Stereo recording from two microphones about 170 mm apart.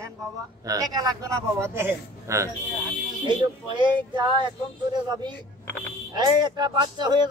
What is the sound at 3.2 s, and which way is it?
Speech, 25° right (ahead or behind).